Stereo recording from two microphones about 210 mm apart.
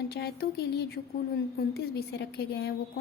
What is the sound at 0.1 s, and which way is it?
A woman's voice, 50° left (ahead or behind).